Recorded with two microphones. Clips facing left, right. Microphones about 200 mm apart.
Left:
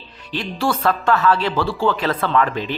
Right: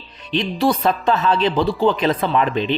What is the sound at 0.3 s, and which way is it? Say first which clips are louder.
Speech: right 4 dB; 20° right (ahead or behind).